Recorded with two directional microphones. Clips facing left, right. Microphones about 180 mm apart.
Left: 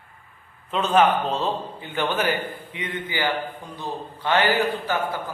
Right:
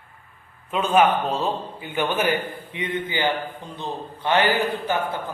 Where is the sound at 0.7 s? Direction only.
10° right (ahead or behind).